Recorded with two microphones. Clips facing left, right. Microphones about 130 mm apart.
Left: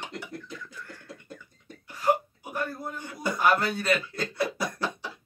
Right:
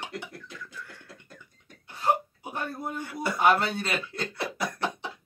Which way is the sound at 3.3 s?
25° right (ahead or behind).